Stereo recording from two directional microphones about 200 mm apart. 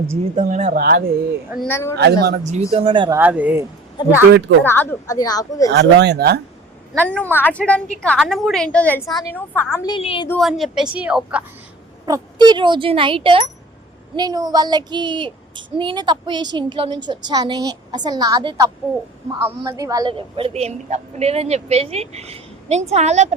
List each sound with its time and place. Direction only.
0.3 s a woman's voice: 35° right (ahead or behind)
1.6 s speech: 10° left (ahead or behind)
2.2 s speech: 50° right (ahead or behind)
2.5 s a woman's voice: 30° right (ahead or behind)
3.2 s speech: 10° right (ahead or behind)
4.3 s speech: 60° right (ahead or behind)
4.6 s speech: 10° left (ahead or behind)
5.7 s speech: 60° right (ahead or behind)
6.9 s a woman's voice: 5° left (ahead or behind)
9.9 s a woman's voice: 25° left (ahead or behind)
10.2 s a woman's voice: centre (ahead or behind)
12.0 s a woman's voice: 20° right (ahead or behind)